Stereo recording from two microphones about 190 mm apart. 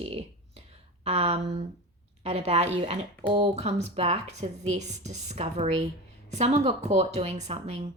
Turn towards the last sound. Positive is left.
turn(degrees=-35)  # may be behind; listen again after turning